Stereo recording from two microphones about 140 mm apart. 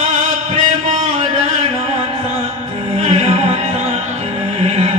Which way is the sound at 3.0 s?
50° right (ahead or behind).